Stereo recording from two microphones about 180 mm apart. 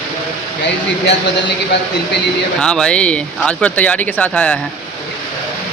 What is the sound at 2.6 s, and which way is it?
Speech, 5° left (ahead or behind).